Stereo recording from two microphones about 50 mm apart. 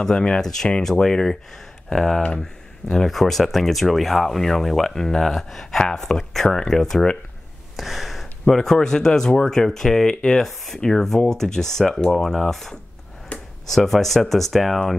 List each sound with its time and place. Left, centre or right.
0.0 s speech: centre
13.3 s a sound: left
13.7 s speech: centre